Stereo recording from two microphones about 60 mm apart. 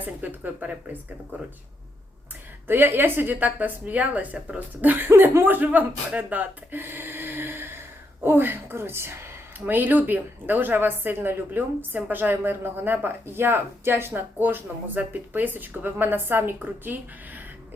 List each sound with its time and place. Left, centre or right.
0.0 s speech: right
2.6 s speech: right